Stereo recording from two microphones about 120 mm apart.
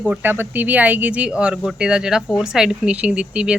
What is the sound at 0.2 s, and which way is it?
Speech, 15° right (ahead or behind).